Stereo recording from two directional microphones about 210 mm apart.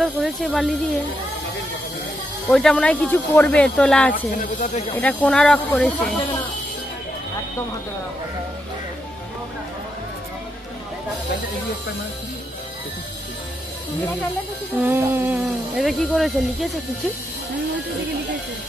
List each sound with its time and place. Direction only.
0.0 s speech: centre (ahead or behind)
2.5 s speech: 5° left (ahead or behind)
4.4 s speech: 35° left (ahead or behind)
5.0 s speech: 5° left (ahead or behind)
14.8 s speech: 10° right (ahead or behind)